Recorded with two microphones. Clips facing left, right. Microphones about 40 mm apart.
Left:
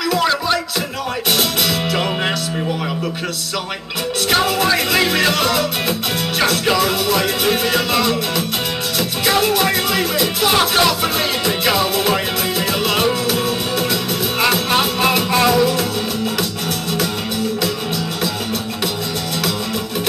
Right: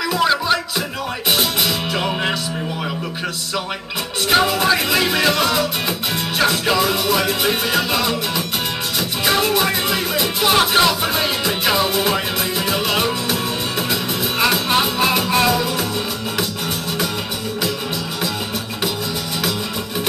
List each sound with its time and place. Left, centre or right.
0.2 s music: centre
4.3 s music: centre
5.5 s music: centre
7.6 s music: centre
9.2 s music: centre
10.5 s music: centre
11.6 s music: centre
13.3 s music: right
14.5 s music: centre